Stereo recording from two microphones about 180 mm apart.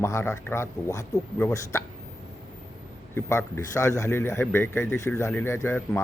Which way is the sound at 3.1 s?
15° left (ahead or behind).